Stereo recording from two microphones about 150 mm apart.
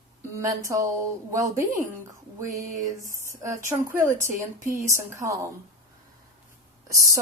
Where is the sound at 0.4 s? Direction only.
20° right (ahead or behind).